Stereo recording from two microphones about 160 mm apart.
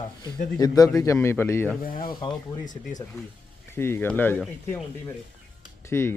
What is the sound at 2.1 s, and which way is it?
Speech, 30° left (ahead or behind).